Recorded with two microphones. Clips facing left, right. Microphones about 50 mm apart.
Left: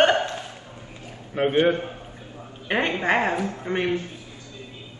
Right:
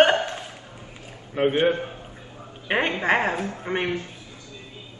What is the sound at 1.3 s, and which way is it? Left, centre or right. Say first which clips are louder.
Speech: left 1 dB; centre.